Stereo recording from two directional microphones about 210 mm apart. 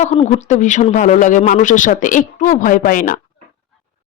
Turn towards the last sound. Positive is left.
turn(degrees=40)  # may be behind; listen again after turning